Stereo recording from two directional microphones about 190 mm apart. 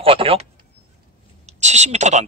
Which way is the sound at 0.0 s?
30° right (ahead or behind).